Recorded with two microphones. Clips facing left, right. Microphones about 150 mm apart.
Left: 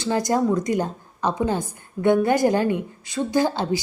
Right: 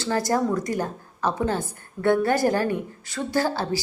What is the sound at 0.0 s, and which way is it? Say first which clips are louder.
A woman's voice: left 2 dB; 20° left (ahead or behind).